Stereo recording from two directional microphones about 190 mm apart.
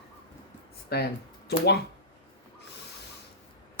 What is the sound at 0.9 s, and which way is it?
Speech, 55° left (ahead or behind).